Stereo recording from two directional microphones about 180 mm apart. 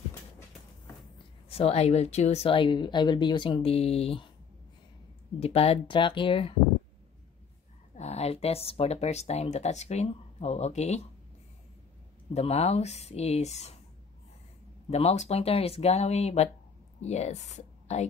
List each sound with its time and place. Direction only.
1.1 s speech: 35° left (ahead or behind)
5.4 s speech: 35° left (ahead or behind)
7.9 s speech: 35° left (ahead or behind)
12.4 s speech: 35° left (ahead or behind)
14.9 s a woman's voice: 35° left (ahead or behind)